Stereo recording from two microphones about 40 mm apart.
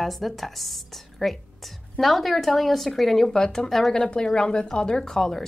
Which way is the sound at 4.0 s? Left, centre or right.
Left.